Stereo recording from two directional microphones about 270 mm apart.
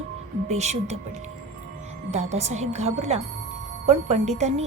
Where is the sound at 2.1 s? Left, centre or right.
Right.